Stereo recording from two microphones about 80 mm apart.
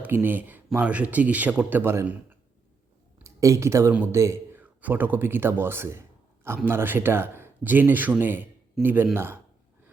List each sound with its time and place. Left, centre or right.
0.0 s speech: right
3.2 s a man's voice: right
4.5 s speech: right